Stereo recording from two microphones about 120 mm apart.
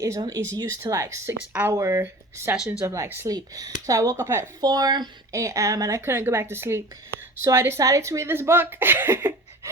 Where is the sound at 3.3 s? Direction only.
30° right (ahead or behind).